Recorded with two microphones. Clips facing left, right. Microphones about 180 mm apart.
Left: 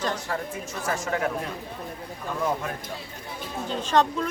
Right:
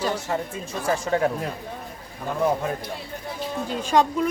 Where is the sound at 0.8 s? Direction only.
30° right (ahead or behind).